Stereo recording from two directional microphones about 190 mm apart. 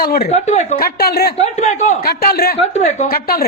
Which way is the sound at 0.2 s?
35° left (ahead or behind).